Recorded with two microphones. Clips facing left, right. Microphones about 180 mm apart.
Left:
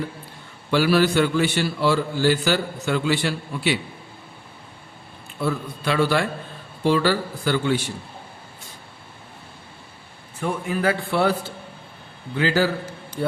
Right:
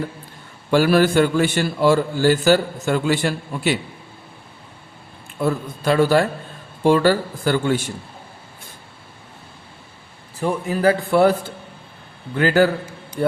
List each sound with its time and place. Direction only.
0.7 s a man's voice: 50° right (ahead or behind)
5.4 s a man's voice: 45° right (ahead or behind)
10.4 s a man's voice: 35° right (ahead or behind); by 12.7 s 50° right (ahead or behind)